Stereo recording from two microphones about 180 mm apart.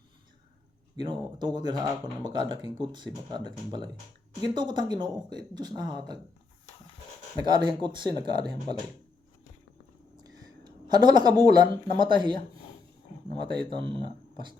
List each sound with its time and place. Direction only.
0.9 s speech: 25° right (ahead or behind)
7.4 s speech: 25° right (ahead or behind)
10.2 s speech: 20° right (ahead or behind)
13.5 s speech: 25° right (ahead or behind)